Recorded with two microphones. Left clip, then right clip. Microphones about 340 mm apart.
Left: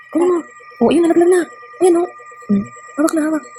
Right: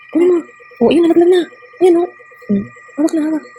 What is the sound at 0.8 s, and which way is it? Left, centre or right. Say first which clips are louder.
Speech: right 2 dB; centre.